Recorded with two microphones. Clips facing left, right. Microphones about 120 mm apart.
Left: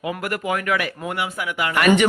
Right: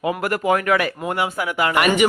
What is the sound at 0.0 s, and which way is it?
Speech, 30° right (ahead or behind).